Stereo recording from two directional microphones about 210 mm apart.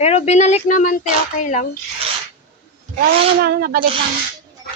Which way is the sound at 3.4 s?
50° right (ahead or behind).